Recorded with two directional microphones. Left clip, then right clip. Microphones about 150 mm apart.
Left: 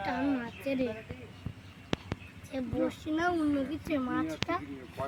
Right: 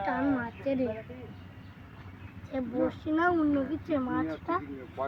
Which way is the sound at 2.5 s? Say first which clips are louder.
Right 2 dB; 20° right (ahead or behind).